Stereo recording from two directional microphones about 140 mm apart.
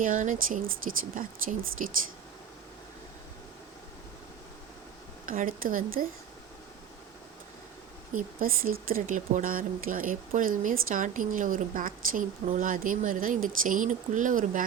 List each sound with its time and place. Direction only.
0.0 s speech: 70° right (ahead or behind)
1.8 s speech: 70° right (ahead or behind)
5.2 s speech: 80° right
8.1 s speech: 90° right; by 14.6 s 70° right (ahead or behind)